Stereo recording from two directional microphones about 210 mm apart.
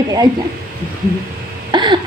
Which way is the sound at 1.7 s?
20° right (ahead or behind).